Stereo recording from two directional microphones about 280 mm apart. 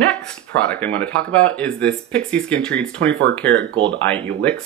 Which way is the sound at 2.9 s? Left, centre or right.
Right.